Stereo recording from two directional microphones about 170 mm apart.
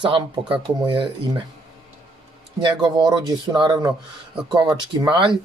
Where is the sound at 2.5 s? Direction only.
25° right (ahead or behind).